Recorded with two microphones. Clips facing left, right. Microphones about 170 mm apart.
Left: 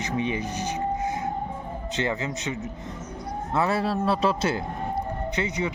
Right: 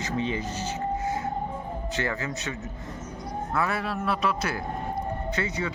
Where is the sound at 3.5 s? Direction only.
30° left (ahead or behind).